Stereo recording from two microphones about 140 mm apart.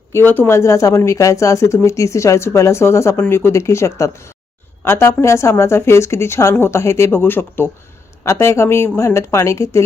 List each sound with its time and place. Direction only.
0.1 s speech: 15° left (ahead or behind)